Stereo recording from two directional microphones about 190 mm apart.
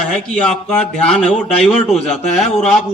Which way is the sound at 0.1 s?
5° left (ahead or behind).